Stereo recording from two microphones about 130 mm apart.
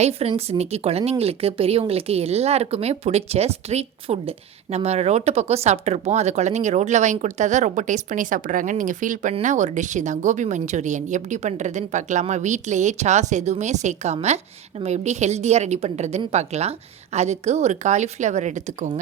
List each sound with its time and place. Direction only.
0.0 s a woman's voice: 50° right (ahead or behind); by 18.9 s 65° right (ahead or behind)